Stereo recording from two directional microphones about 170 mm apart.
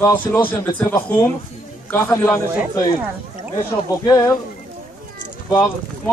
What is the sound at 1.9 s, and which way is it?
Speech, 15° left (ahead or behind).